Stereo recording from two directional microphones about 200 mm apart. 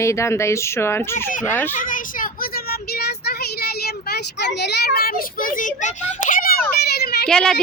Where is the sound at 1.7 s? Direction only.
40° left (ahead or behind).